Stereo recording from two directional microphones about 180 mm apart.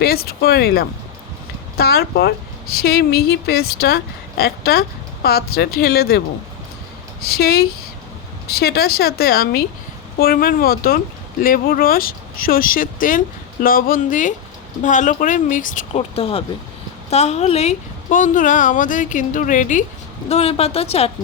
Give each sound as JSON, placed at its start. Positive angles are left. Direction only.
{"t": 0.0, "sound": "a woman's voice", "side_deg": 60}
{"t": 7.3, "sound": "a woman's voice", "side_deg": 60}